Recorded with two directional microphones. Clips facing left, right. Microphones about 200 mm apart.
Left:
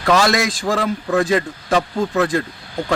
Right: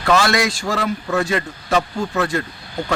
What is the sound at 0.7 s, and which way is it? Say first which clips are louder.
A man's voice: left 3 dB; 35° left (ahead or behind).